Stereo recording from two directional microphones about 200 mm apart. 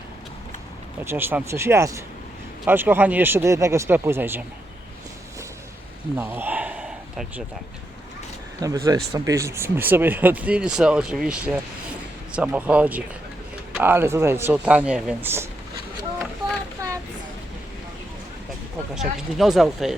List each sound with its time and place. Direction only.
1.0 s speech: 10° right (ahead or behind)
6.1 s a sound: 10° right (ahead or behind)
8.6 s speech: 15° right (ahead or behind)
18.9 s speech: centre (ahead or behind)